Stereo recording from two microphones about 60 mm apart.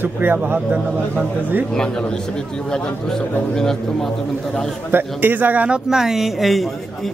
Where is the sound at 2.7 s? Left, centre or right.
Centre.